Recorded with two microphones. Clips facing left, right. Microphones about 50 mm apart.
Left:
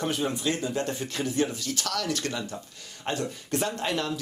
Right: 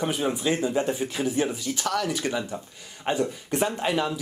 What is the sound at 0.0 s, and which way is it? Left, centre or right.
Speech, centre.